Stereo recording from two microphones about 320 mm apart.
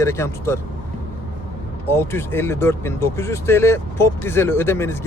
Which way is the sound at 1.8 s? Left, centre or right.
Centre.